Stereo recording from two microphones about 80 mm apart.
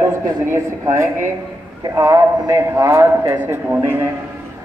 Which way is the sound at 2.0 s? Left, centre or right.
Right.